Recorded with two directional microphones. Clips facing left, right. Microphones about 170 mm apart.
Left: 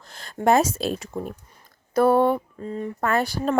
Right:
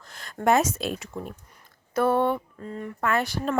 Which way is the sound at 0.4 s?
30° left (ahead or behind).